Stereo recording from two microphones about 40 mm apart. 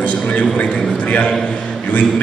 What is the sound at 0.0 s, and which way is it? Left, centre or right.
A man's voice, left.